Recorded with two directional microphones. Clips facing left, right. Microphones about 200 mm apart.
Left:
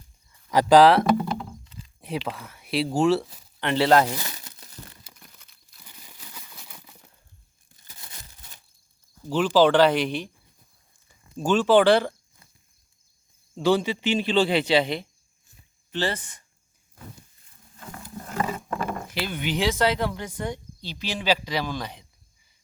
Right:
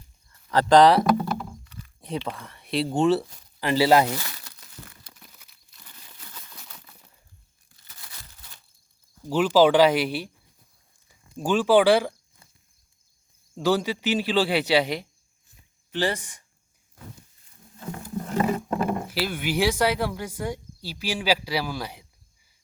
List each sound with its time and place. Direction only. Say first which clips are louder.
0.3 s a sound: left 1 dB; 10° left (ahead or behind)
1.6 s a sound: right 1 dB; 20° left (ahead or behind)
2.0 s speech: even; 5° left (ahead or behind)
4.2 s crumpling: left 2 dB; 20° left (ahead or behind)
5.8 s crumpling: left 1 dB; 10° left (ahead or behind)
8.0 s a sound: left 1 dB; 25° left (ahead or behind)
9.3 s speech: right 1 dB; 10° right (ahead or behind)
13.7 s speech: left 1 dB; 5° right (ahead or behind)
18.3 s wild animals: right 4 dB; 30° right (ahead or behind)
18.8 s speech: right 4 dB; 10° right (ahead or behind)